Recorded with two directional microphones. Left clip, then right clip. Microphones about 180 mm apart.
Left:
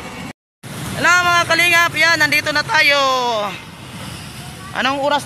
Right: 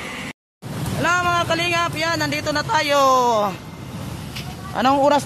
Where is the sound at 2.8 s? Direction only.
40° right (ahead or behind).